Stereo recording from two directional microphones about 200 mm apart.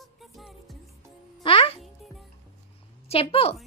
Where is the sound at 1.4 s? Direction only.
30° left (ahead or behind).